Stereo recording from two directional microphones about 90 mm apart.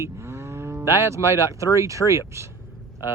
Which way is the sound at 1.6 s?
35° right (ahead or behind).